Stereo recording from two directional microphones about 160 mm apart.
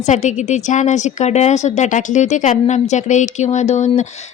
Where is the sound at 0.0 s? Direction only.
50° left (ahead or behind).